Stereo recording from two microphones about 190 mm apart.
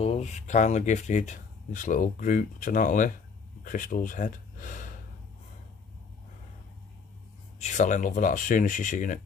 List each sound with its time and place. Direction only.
0.0 s speech: 35° left (ahead or behind)
7.5 s speech: 40° left (ahead or behind)